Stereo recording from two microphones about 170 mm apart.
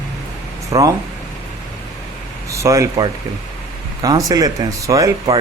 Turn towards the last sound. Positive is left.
turn(degrees=-20)  # may be behind; listen again after turning